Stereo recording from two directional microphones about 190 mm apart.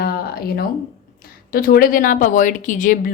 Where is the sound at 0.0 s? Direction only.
55° left (ahead or behind).